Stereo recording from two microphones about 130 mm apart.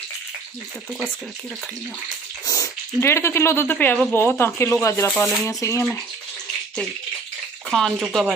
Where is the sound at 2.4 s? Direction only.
25° left (ahead or behind).